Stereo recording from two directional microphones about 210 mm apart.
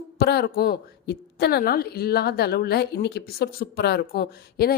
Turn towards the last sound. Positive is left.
turn(degrees=45)  # may be behind; listen again after turning